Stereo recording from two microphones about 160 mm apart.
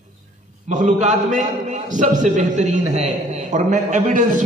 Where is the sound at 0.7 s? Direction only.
50° right (ahead or behind).